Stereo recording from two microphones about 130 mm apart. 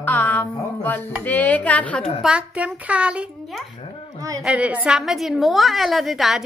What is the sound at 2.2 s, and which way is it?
A woman's voice, 10° right (ahead or behind).